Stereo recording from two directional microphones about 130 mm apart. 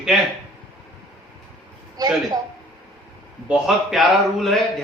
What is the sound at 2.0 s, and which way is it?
Speech, 30° right (ahead or behind).